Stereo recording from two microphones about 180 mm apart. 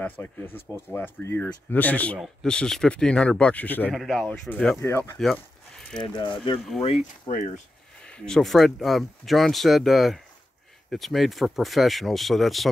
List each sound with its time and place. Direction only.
0.0 s speech: 10° left (ahead or behind)
5.2 s a sound: centre (ahead or behind)
6.1 s speech: 25° left (ahead or behind)
7.2 s speech: 45° left (ahead or behind)
8.0 s speech: 5° left (ahead or behind)